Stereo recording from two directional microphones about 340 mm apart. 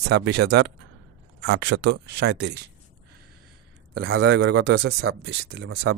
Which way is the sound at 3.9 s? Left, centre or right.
Right.